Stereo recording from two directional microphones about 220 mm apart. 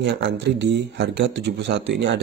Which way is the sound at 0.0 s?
50° right (ahead or behind).